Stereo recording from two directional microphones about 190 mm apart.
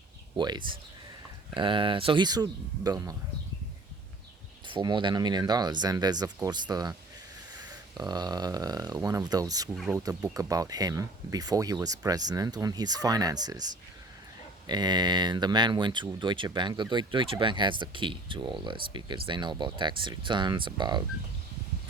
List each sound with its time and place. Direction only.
0.3 s speech: 25° right (ahead or behind)
4.6 s speech: 25° right (ahead or behind)
7.9 s speech: 20° right (ahead or behind)
9.7 s speech: centre (ahead or behind)
10.3 s speech: 20° right (ahead or behind)